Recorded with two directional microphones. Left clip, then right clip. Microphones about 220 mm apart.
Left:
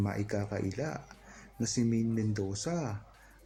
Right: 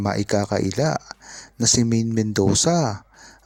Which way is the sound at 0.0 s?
40° right (ahead or behind).